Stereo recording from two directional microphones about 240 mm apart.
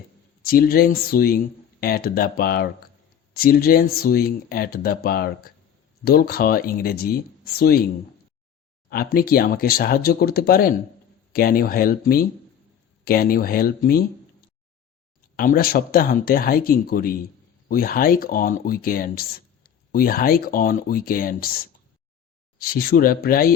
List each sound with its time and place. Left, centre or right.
0.4 s speech: left
8.9 s speech: left
15.4 s speech: left
22.5 s speech: left